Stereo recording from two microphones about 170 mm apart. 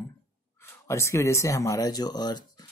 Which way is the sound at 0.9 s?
15° left (ahead or behind).